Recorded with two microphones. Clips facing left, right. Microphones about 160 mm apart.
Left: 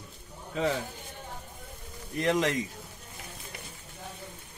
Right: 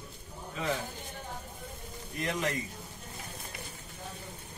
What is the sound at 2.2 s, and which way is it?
Speech, 90° left.